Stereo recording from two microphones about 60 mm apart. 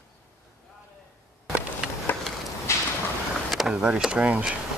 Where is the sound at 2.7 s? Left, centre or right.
Left.